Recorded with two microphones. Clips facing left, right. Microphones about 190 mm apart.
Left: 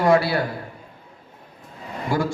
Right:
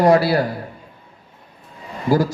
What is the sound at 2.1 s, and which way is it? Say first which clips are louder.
Speech: right 6 dB; 40° right (ahead or behind).